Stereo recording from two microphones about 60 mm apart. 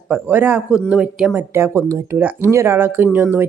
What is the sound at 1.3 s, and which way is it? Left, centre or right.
Speech, right.